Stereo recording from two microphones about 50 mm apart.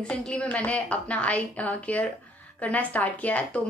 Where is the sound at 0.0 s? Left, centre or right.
Centre.